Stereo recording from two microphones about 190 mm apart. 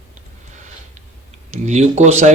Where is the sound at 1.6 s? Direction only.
40° right (ahead or behind).